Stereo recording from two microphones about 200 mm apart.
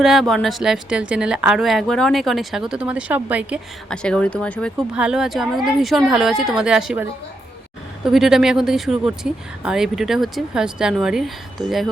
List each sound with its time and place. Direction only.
0.0 s a woman's voice: centre (ahead or behind)
3.8 s a woman's voice: 5° left (ahead or behind)
8.0 s a woman's voice: centre (ahead or behind)